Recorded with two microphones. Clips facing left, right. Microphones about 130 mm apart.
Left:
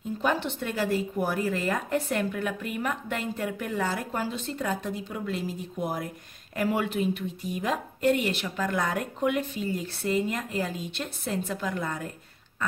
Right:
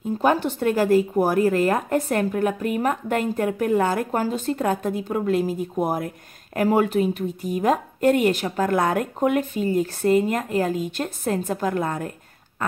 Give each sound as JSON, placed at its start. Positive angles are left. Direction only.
{"t": 0.2, "sound": "a woman's voice", "side_deg": -45}